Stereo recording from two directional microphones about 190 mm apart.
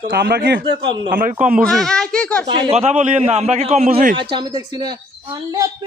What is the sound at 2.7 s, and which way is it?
A man's voice, 35° right (ahead or behind).